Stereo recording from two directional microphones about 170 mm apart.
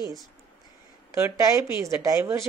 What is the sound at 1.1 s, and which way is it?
A woman's voice, 15° right (ahead or behind).